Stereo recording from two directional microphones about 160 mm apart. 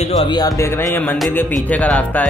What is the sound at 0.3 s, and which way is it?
A man's voice, 25° left (ahead or behind).